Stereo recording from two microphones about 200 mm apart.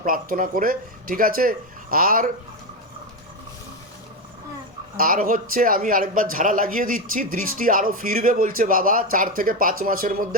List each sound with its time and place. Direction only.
0.0 s a man's voice: 45° right (ahead or behind)
4.9 s a man's voice: 45° right (ahead or behind)